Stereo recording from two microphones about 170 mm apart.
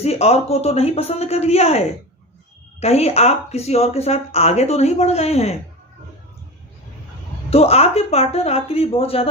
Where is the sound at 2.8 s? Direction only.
40° left (ahead or behind).